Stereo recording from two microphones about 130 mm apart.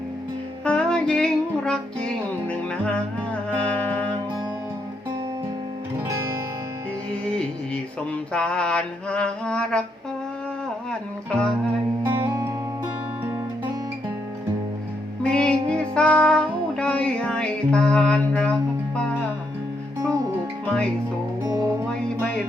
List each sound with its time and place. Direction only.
0.6 s music: 5° left (ahead or behind)
3.5 s music: 10° left (ahead or behind)
6.1 s music: 25° right (ahead or behind)
8.3 s mantra: 5° left (ahead or behind)
11.3 s mantra: 10° left (ahead or behind)
15.2 s music: 5° left (ahead or behind)
20.0 s music: 25° right (ahead or behind)
21.4 s music: 30° right (ahead or behind)